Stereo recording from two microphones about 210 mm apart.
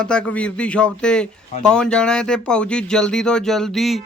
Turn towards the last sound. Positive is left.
turn(degrees=0)  # may be behind; listen again after turning